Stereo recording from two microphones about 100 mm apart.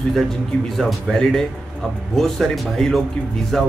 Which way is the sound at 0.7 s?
Centre (ahead or behind).